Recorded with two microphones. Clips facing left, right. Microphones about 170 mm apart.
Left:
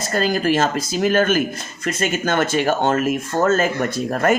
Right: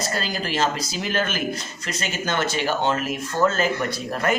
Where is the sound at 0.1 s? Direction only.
50° left (ahead or behind).